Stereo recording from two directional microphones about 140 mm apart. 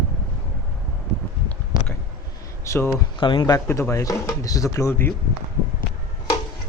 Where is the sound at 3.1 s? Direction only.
35° left (ahead or behind).